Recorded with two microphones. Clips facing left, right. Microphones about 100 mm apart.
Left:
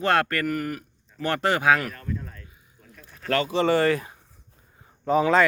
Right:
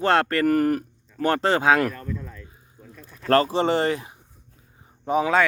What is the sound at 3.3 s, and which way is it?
Speech, 35° right (ahead or behind).